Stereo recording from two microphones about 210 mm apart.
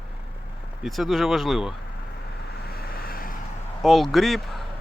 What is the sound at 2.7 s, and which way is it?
Vehicle, 45° left (ahead or behind).